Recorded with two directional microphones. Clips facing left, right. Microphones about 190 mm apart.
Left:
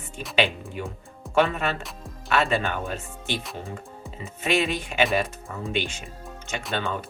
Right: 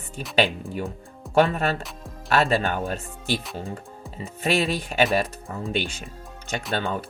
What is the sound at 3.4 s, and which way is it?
Speech, centre (ahead or behind).